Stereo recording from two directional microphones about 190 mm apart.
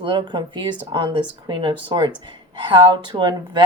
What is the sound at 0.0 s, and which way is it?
Speech, 25° right (ahead or behind).